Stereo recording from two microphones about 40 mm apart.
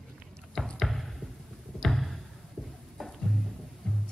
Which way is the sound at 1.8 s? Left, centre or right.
Centre.